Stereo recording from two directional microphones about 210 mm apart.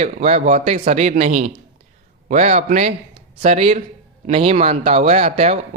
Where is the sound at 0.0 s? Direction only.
30° right (ahead or behind).